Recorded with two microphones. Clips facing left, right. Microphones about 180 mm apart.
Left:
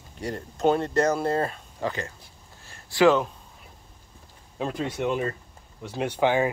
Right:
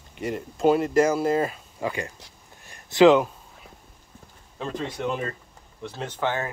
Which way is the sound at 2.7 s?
20° right (ahead or behind).